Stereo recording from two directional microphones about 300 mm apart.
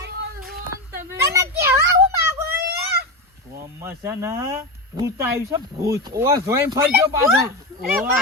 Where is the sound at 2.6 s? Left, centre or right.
Right.